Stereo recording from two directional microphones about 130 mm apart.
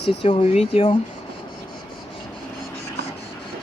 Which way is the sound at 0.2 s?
50° left (ahead or behind).